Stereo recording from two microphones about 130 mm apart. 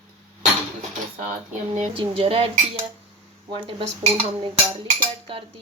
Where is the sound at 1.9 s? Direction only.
40° right (ahead or behind).